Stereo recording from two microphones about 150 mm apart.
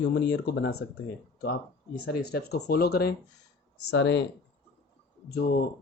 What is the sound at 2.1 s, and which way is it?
Speech, 90° left.